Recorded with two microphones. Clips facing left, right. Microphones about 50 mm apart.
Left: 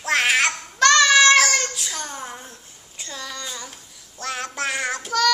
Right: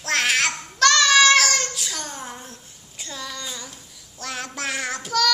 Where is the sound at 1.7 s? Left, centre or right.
Centre.